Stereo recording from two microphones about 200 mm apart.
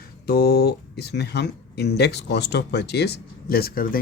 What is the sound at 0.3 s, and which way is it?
Speech, 50° left (ahead or behind).